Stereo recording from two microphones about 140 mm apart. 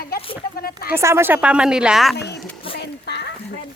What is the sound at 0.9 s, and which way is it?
A child's voice, 20° right (ahead or behind).